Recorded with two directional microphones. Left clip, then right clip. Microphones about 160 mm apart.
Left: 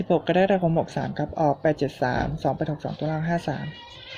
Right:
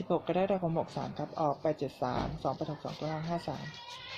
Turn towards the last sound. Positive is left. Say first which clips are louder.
# left 9 dB
turn(degrees=35)  # may be behind; listen again after turning